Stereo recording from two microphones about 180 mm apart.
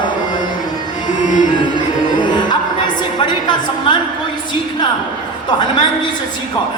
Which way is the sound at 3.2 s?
25° left (ahead or behind).